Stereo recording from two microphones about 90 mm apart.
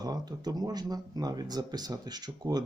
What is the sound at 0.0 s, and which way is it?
Speech, 45° right (ahead or behind).